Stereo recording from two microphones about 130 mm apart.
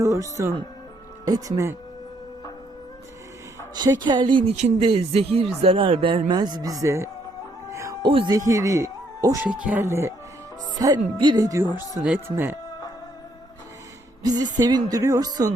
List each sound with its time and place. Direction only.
0.0 s speech: 25° right (ahead or behind)
3.8 s speech: 35° right (ahead or behind)
4.5 s speech: 60° right (ahead or behind)
4.9 s speech: 50° right (ahead or behind); by 7.1 s 20° right (ahead or behind)
7.7 s music: 25° right (ahead or behind)
8.0 s speech: 40° right (ahead or behind)
8.4 s speech: 25° right (ahead or behind)
9.5 s speech: 10° right (ahead or behind)
9.8 s speech: 20° right (ahead or behind)
14.2 s speech: 30° right (ahead or behind)